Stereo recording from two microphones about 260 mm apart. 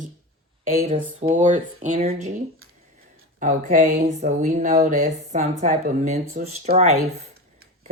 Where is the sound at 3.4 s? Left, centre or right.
Right.